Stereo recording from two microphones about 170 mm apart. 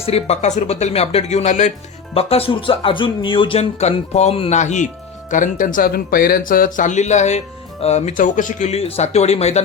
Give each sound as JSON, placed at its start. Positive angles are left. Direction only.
{"t": 0.0, "sound": "speech", "side_deg": 40}